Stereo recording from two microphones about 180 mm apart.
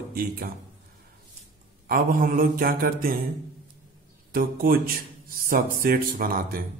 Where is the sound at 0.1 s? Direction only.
55° right (ahead or behind).